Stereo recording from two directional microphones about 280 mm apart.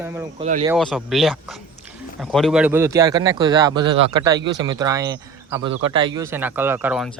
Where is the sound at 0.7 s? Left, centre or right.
Centre.